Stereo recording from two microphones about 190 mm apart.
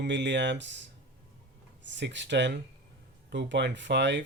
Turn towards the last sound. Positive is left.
turn(degrees=-70)  # may be behind; listen again after turning